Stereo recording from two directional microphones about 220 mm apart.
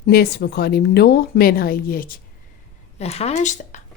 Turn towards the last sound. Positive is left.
turn(degrees=35)  # may be behind; listen again after turning